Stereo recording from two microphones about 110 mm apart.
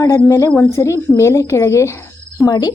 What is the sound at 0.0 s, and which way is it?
A woman's voice, 25° left (ahead or behind).